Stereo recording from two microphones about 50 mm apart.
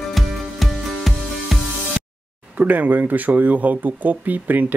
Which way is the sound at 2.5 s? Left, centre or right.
Right.